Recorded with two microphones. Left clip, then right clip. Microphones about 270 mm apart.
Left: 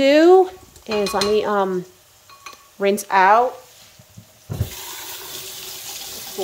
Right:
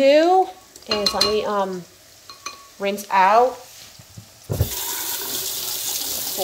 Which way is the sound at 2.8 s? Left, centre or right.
Left.